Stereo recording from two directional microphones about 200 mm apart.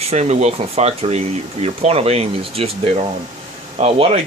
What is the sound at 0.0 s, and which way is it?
Speech, 35° right (ahead or behind).